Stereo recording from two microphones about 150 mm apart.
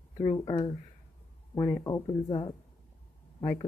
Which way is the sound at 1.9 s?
30° left (ahead or behind).